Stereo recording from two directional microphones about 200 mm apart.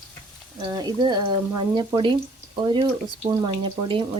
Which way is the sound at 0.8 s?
20° right (ahead or behind).